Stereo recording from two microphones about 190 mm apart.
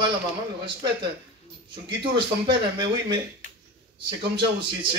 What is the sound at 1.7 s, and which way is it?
Speech, 25° right (ahead or behind).